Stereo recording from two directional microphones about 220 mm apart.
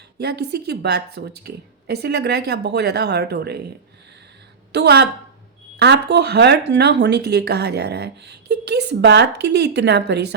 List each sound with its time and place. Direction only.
0.2 s speech: 50° right (ahead or behind)
4.7 s speech: 50° right (ahead or behind)